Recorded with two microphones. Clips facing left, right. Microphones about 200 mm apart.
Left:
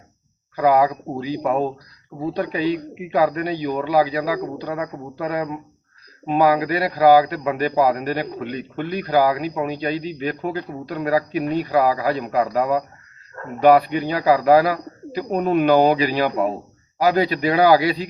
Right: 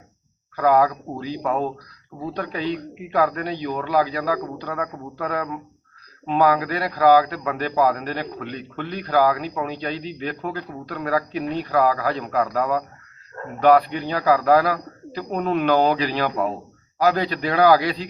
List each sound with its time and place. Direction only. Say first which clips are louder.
0.5 s a man's voice: left 1 dB; 10° left (ahead or behind)